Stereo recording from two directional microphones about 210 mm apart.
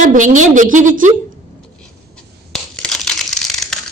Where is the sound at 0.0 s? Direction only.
35° right (ahead or behind).